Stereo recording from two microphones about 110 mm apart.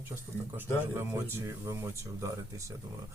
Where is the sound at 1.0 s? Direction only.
25° right (ahead or behind).